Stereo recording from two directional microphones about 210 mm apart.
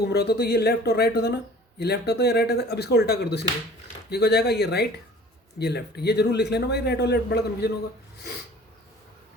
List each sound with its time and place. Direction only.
0.0 s a man's voice: 50° left (ahead or behind)